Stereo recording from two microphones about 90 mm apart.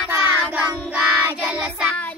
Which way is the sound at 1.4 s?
15° right (ahead or behind).